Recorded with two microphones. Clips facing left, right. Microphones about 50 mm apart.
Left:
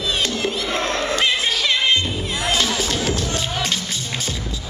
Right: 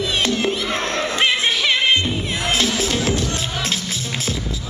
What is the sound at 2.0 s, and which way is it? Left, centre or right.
Music, right.